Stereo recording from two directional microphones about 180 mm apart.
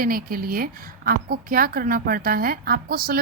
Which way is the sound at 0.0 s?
55° right (ahead or behind).